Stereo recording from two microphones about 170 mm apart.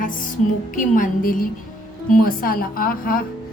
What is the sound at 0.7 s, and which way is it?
A woman's voice, 50° left (ahead or behind).